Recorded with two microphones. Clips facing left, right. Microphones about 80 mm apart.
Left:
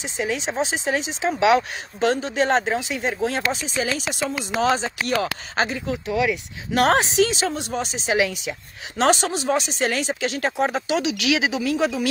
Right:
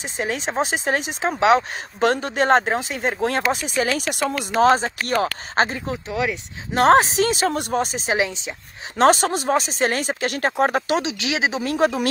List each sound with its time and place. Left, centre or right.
0.0 s speech: right
4.6 s speech: right
8.2 s speech: right
8.9 s speech: right
11.0 s speech: right
11.6 s speech: right